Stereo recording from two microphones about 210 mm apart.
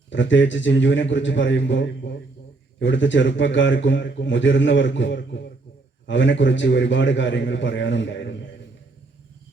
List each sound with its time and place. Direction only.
0.1 s a man's voice: 60° left (ahead or behind)